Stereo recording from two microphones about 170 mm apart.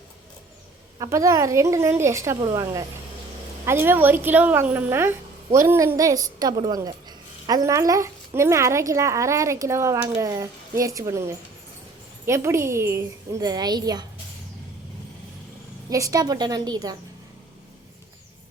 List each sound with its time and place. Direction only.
0.9 s a woman's voice: 20° right (ahead or behind)
15.9 s a woman's voice: 20° right (ahead or behind)